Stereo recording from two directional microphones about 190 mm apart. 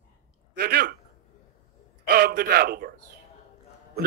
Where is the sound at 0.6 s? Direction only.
55° right (ahead or behind).